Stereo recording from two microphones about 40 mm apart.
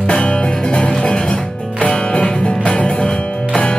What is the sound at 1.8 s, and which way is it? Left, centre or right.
Music, left.